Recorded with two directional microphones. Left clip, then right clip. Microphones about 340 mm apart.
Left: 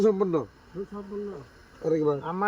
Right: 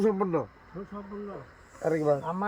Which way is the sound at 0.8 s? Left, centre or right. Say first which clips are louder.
Left 6 dB; centre.